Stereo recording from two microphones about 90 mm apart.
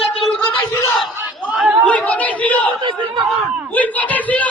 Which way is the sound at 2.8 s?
70° right (ahead or behind).